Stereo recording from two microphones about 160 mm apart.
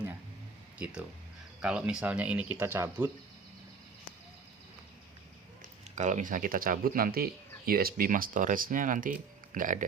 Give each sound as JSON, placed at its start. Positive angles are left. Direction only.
{"t": 1.6, "sound": "speech", "side_deg": -5}
{"t": 5.9, "sound": "speech", "side_deg": -50}